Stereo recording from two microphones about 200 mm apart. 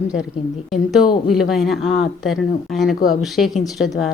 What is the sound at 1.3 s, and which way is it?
A woman's voice, centre (ahead or behind).